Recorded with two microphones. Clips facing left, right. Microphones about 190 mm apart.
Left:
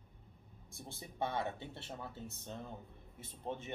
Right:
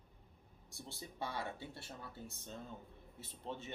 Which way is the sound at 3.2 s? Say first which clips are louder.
Left 4 dB; 55° left (ahead or behind).